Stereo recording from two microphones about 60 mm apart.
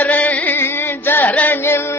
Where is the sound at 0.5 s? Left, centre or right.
Left.